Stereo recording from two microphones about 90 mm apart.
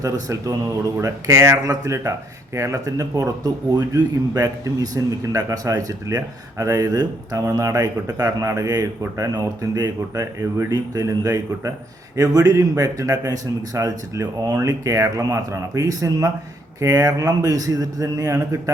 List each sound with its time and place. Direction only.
0.0 s a man's voice: 40° right (ahead or behind)